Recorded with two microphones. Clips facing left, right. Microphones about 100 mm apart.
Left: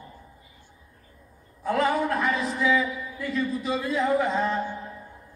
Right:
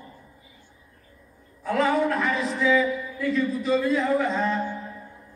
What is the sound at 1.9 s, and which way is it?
A man's voice, 10° left (ahead or behind).